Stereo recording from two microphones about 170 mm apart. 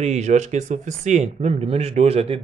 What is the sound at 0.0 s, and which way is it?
A woman's voice, 40° right (ahead or behind).